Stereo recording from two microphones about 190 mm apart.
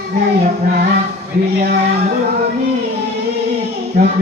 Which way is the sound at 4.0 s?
45° right (ahead or behind).